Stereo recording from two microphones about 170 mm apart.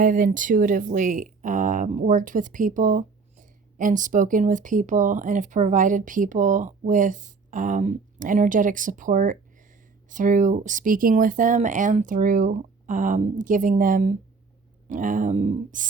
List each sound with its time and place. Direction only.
0.0 s speech: 50° right (ahead or behind)